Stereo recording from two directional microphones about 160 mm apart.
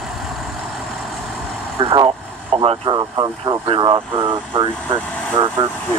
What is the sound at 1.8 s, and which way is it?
Speech, 30° right (ahead or behind).